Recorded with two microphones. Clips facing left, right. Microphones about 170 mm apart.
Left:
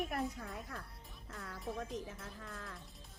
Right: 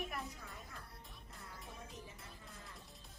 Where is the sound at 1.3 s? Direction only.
90° left.